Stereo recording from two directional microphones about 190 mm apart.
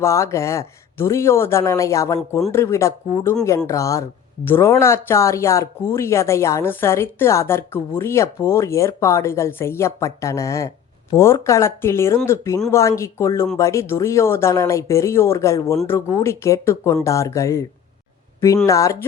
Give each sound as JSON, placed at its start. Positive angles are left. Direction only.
{"t": 0.0, "sound": "speech", "side_deg": 15}